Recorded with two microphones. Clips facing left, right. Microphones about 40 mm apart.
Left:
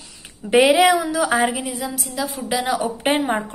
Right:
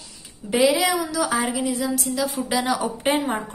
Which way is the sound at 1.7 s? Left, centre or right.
Centre.